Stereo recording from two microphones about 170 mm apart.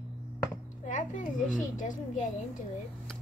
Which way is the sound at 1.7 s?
50° left (ahead or behind).